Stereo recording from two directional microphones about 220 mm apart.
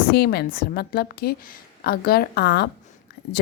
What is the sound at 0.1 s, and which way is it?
A woman's voice, 45° left (ahead or behind).